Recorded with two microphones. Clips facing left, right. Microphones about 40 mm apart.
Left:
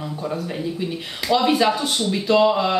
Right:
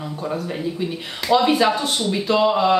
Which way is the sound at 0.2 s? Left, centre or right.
Centre.